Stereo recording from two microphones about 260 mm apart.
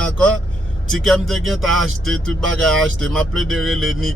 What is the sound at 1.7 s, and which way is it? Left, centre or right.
Speech, right.